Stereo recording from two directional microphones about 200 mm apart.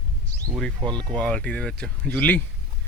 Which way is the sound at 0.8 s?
20° right (ahead or behind).